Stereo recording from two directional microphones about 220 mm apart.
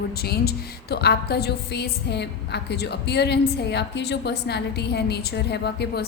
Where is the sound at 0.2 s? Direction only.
45° left (ahead or behind).